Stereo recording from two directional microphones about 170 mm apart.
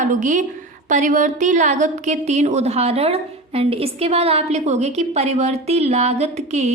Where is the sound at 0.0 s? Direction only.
50° right (ahead or behind).